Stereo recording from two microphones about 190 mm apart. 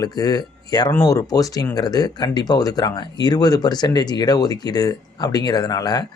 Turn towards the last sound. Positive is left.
turn(degrees=20)  # may be behind; listen again after turning